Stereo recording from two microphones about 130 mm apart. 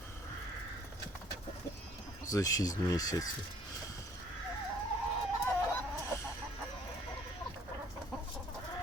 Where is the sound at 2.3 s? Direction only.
25° left (ahead or behind).